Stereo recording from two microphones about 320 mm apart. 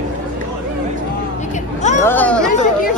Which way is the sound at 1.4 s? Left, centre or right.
Left.